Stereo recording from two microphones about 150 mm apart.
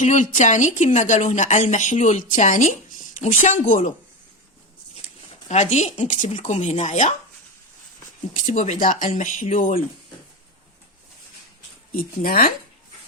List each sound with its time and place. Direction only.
0.0 s a woman's voice: 55° left (ahead or behind)
5.0 s speech: 50° left (ahead or behind)
8.4 s a woman's voice: 50° left (ahead or behind); by 9.8 s 65° left (ahead or behind)
11.9 s speech: 70° left (ahead or behind)